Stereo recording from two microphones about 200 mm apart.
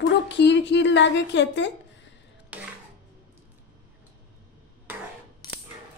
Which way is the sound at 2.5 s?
5° right (ahead or behind).